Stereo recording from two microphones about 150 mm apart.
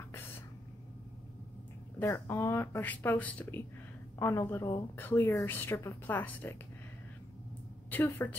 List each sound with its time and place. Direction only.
2.0 s a woman's voice: 15° left (ahead or behind)
7.9 s a woman's voice: 15° left (ahead or behind)